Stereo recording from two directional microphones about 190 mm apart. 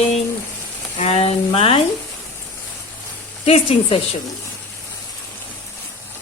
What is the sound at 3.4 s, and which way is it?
Speech, 30° left (ahead or behind).